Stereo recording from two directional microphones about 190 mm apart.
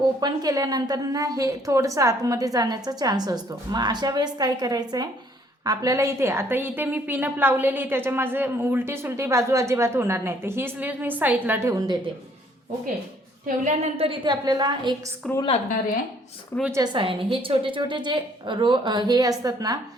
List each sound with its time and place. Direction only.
0.2 s a woman's voice: 20° right (ahead or behind)
13.7 s a woman's voice: 30° right (ahead or behind)
15.2 s a woman's voice: centre (ahead or behind)
16.7 s a woman's voice: 25° right (ahead or behind)